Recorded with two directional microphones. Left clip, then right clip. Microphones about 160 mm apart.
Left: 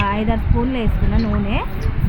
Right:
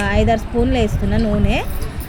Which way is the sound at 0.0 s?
20° right (ahead or behind).